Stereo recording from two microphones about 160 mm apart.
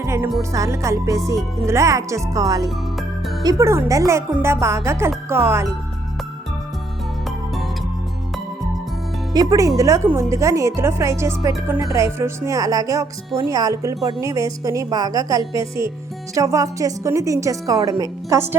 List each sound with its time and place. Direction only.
0.0 s music: 20° right (ahead or behind)
0.5 s a woman's voice: 20° right (ahead or behind)
9.3 s speech: 25° right (ahead or behind)